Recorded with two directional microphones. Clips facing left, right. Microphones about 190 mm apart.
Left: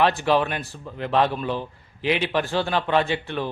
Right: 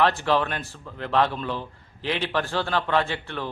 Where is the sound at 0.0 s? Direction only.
15° left (ahead or behind).